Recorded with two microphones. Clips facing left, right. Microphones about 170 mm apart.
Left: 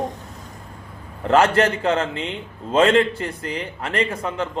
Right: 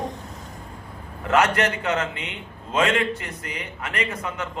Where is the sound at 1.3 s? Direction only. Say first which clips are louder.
Left 4 dB; 30° left (ahead or behind).